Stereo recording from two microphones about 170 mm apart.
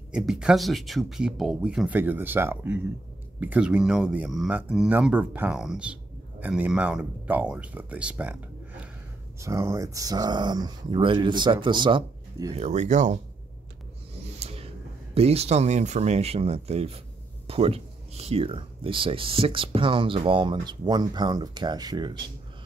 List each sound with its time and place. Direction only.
0.1 s speech: 5° right (ahead or behind); by 12.5 s 25° right (ahead or behind)
12.5 s speech: 40° right (ahead or behind)
14.4 s a sound: 35° right (ahead or behind)
15.1 s speech: 35° right (ahead or behind)